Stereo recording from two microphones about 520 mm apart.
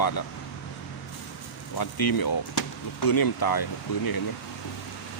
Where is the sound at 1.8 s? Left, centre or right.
Left.